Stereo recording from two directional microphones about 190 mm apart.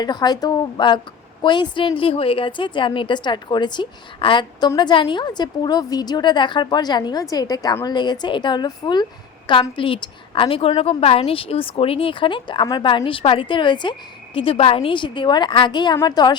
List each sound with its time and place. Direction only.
0.0 s a woman's voice: 20° left (ahead or behind)